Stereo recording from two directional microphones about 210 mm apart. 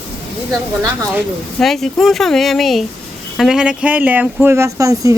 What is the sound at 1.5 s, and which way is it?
Speech, centre (ahead or behind).